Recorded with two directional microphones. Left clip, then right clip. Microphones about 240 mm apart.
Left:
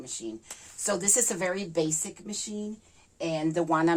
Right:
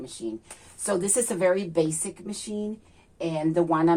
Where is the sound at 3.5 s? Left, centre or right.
Left.